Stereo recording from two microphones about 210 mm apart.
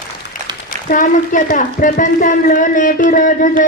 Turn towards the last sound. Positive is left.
turn(degrees=40)  # may be behind; listen again after turning